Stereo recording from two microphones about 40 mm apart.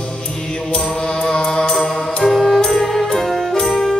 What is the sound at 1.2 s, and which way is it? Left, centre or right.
Music, centre.